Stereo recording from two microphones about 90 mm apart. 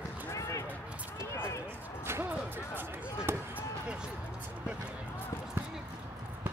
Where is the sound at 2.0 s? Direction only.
30° right (ahead or behind).